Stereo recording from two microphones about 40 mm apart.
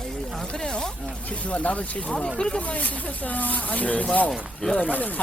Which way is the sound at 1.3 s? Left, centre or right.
Left.